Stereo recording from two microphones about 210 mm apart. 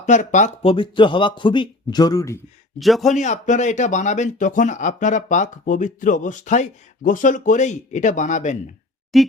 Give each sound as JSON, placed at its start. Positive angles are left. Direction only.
{"t": 0.0, "sound": "a man's voice", "side_deg": 35}
{"t": 2.7, "sound": "a man's voice", "side_deg": 0}
{"t": 3.1, "sound": "speech", "side_deg": 35}
{"t": 9.1, "sound": "a man's voice", "side_deg": 0}